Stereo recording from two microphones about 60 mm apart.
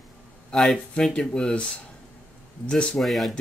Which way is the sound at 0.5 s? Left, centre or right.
Centre.